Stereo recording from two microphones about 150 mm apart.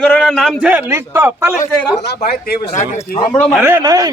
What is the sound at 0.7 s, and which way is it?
Speech, 10° right (ahead or behind).